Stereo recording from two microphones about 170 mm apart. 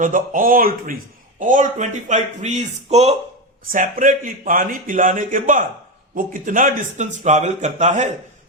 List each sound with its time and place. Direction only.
0.0 s a man's voice: 50° right (ahead or behind)
3.7 s a man's voice: 50° right (ahead or behind)